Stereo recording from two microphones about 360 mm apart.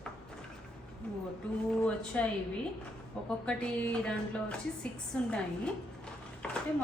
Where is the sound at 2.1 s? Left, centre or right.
Centre.